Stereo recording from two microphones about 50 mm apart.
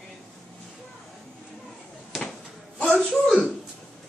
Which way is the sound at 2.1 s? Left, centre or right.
Centre.